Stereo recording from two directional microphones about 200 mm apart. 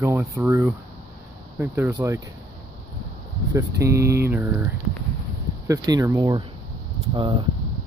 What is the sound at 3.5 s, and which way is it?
Speech, 15° right (ahead or behind).